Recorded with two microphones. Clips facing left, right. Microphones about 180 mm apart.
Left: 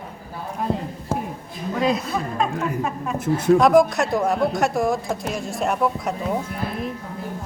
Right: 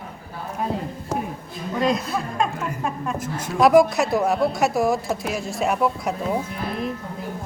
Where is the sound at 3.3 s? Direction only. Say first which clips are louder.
Left 13 dB; 60° left (ahead or behind).